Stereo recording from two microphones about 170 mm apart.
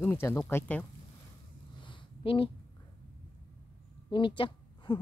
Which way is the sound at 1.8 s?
30° left (ahead or behind).